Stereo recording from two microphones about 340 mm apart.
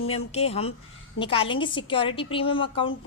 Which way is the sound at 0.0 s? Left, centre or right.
Centre.